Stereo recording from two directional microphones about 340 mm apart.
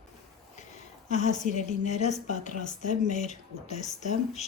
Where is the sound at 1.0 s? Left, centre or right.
Left.